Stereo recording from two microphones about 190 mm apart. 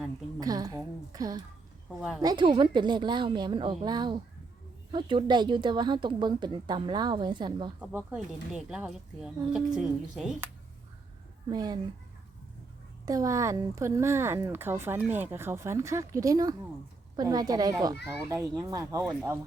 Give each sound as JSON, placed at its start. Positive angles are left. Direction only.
{"t": 0.3, "sound": "a woman's voice", "side_deg": -20}
{"t": 2.0, "sound": "speech", "side_deg": 0}
{"t": 2.2, "sound": "a woman's voice", "side_deg": -25}
{"t": 7.8, "sound": "speech", "side_deg": -5}
{"t": 11.5, "sound": "a woman's voice", "side_deg": -20}
{"t": 13.1, "sound": "a woman's voice", "side_deg": -15}